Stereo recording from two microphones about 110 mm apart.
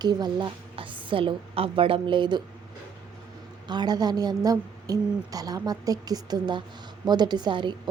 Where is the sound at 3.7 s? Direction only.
40° right (ahead or behind).